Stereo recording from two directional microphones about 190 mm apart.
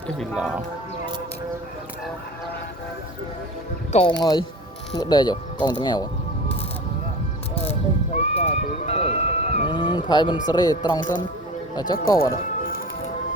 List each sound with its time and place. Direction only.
0.3 s speech: 5° right (ahead or behind)
3.9 s speech: 25° left (ahead or behind)
7.5 s speech: 30° left (ahead or behind)
11.9 s speech: 50° left (ahead or behind)